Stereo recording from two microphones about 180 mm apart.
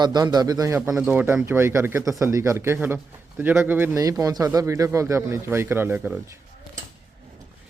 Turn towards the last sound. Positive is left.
turn(degrees=-10)  # may be behind; listen again after turning